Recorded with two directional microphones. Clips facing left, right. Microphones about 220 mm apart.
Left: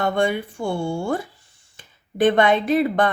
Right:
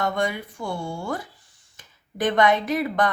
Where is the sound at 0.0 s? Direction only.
30° left (ahead or behind).